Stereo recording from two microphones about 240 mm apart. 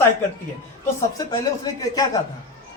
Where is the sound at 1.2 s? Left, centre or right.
Centre.